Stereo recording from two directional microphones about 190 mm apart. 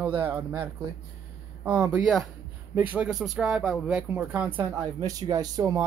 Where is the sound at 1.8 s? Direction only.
Centre (ahead or behind); by 5.8 s 20° right (ahead or behind).